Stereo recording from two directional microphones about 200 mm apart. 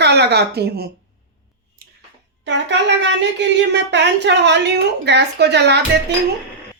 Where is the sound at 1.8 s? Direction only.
45° right (ahead or behind).